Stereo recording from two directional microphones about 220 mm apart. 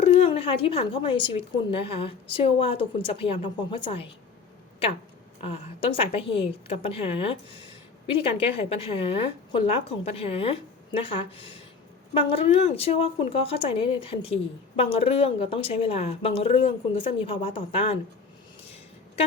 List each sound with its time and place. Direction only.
0.0 s a woman's voice: 30° left (ahead or behind)
5.4 s a woman's voice: 25° left (ahead or behind)